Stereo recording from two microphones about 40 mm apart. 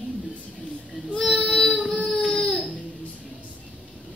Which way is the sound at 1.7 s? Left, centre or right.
Left.